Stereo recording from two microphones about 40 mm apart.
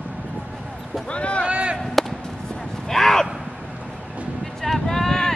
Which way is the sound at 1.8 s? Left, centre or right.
Centre.